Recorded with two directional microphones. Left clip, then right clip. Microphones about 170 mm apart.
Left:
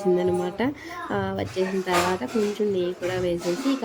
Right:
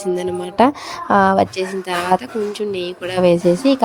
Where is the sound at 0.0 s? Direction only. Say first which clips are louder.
Right 1 dB; 60° right (ahead or behind).